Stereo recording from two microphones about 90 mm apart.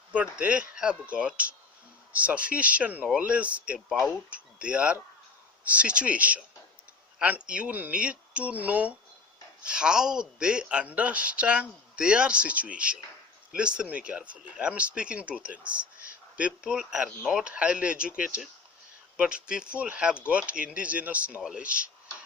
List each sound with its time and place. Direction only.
0.1 s speech: 15° right (ahead or behind)
3.8 s speech: 5° right (ahead or behind)
4.3 s speech: 15° right (ahead or behind)